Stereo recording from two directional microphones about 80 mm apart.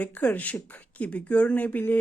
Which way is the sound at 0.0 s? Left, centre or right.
Left.